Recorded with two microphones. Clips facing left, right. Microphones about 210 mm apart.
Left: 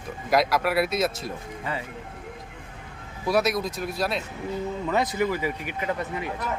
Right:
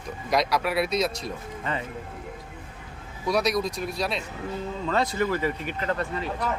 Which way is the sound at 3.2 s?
5° left (ahead or behind).